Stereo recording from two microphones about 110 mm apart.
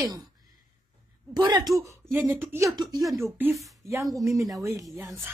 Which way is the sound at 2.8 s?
35° right (ahead or behind).